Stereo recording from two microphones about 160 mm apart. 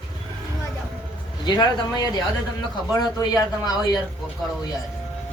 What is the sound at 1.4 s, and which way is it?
A man's voice, 25° left (ahead or behind).